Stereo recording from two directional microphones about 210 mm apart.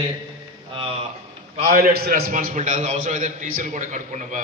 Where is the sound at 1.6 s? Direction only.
45° right (ahead or behind).